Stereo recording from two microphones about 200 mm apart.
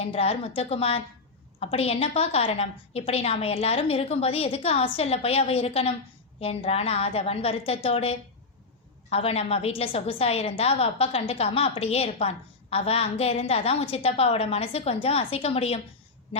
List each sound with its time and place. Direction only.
0.0 s a woman's voice: 30° left (ahead or behind)